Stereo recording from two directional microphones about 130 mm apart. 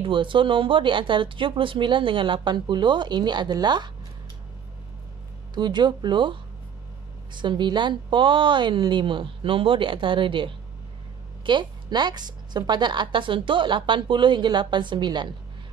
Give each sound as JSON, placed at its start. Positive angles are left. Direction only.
{"t": 0.0, "sound": "speech", "side_deg": -40}
{"t": 5.5, "sound": "speech", "side_deg": -35}
{"t": 7.3, "sound": "speech", "side_deg": -35}